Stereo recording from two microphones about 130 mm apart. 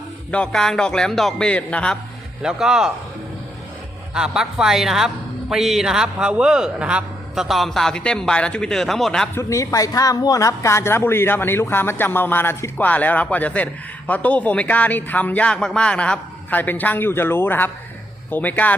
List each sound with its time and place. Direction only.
0.3 s a man's voice: 10° left (ahead or behind)
2.4 s a man's voice: 5° right (ahead or behind)
4.1 s a man's voice: 5° right (ahead or behind)
9.3 s a woman's voice: 20° left (ahead or behind)